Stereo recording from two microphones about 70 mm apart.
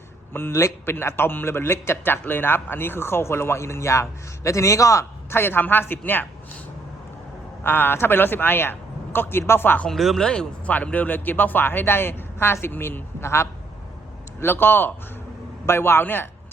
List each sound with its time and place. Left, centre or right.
0.3 s speech: left
5.3 s speech: left
7.6 s a man's voice: left
9.9 s speech: centre
10.7 s speech: left